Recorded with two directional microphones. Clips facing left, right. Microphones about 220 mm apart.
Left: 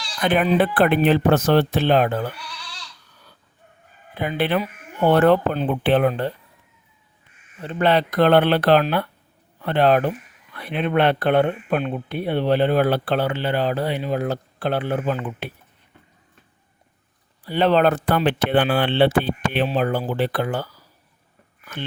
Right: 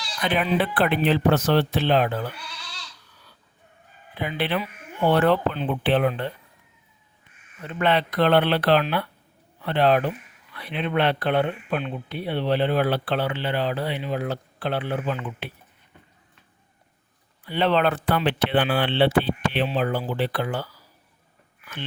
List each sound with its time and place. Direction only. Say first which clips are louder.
0.2 s speech: left 5 dB; 50° left (ahead or behind)
4.1 s speech: left 4 dB; 50° left (ahead or behind)
7.6 s speech: left 4 dB; 35° left (ahead or behind)
17.4 s speech: left 4 dB; 40° left (ahead or behind)
21.6 s a sound: left 4 dB; 45° left (ahead or behind)